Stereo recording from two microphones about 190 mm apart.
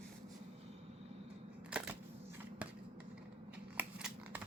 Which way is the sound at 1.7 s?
5° right (ahead or behind).